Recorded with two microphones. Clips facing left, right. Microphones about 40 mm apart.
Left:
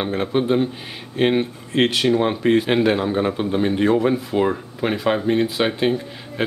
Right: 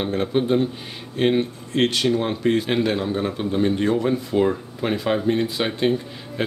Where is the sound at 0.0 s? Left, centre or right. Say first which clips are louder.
Left 1 dB; centre.